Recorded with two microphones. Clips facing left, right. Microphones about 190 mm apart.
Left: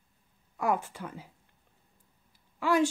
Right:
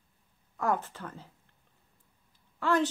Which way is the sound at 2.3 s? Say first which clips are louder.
Left 1 dB; 10° left (ahead or behind).